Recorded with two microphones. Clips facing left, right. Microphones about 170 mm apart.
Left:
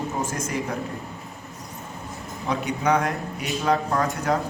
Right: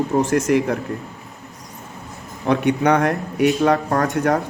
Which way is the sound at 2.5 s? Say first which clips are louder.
Right 6 dB; 65° right (ahead or behind).